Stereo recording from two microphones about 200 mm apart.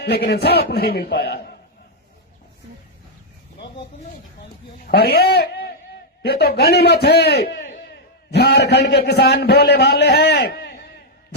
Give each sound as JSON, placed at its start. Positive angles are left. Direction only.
{"t": 0.0, "sound": "a man's voice", "side_deg": 55}
{"t": 4.9, "sound": "a man's voice", "side_deg": 55}